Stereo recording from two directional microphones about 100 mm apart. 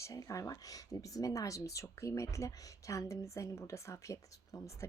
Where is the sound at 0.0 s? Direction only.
35° left (ahead or behind).